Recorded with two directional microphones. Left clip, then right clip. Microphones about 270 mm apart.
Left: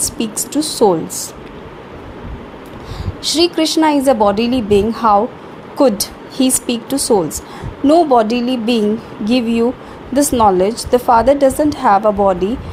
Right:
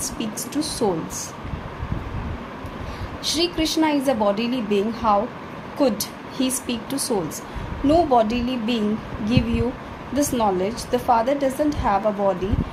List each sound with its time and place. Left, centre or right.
0.2 s a woman's voice: left
3.2 s a woman's voice: left